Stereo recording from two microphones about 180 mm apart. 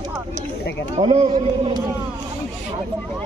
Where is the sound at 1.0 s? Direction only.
25° right (ahead or behind).